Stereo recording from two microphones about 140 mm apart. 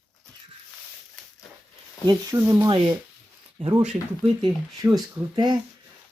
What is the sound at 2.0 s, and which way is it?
Speech, 30° right (ahead or behind).